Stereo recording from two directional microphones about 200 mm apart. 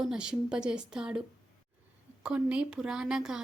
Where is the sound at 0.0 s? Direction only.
5° right (ahead or behind).